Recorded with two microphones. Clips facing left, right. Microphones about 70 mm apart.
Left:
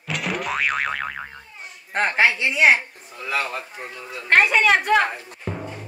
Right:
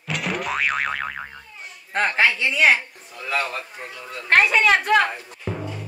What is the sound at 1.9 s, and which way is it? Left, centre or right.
Speech, centre.